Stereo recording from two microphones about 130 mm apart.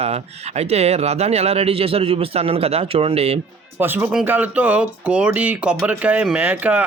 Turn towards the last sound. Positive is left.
turn(degrees=-10)  # may be behind; listen again after turning